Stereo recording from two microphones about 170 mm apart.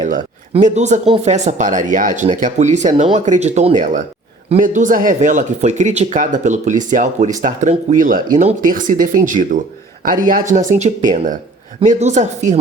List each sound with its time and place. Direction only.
0.6 s speech: 45° right (ahead or behind)